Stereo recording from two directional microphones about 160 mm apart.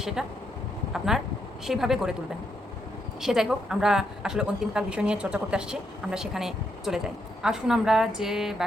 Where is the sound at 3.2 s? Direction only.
Centre (ahead or behind).